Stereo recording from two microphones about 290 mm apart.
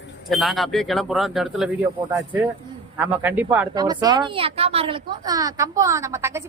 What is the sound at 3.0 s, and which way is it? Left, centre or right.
A woman's voice, centre.